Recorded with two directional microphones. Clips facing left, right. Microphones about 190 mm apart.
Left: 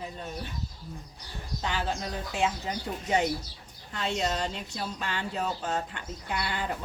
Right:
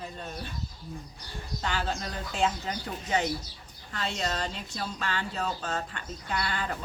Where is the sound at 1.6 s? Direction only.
15° left (ahead or behind).